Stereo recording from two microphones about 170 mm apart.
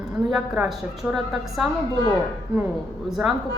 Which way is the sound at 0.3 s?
5° right (ahead or behind).